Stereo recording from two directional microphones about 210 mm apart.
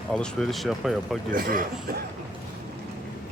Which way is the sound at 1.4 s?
45° right (ahead or behind).